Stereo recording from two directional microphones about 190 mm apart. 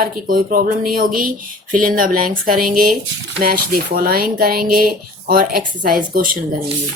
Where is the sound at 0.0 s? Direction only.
50° right (ahead or behind).